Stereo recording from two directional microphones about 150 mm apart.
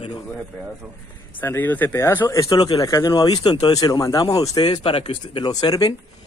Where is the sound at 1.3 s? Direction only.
10° left (ahead or behind).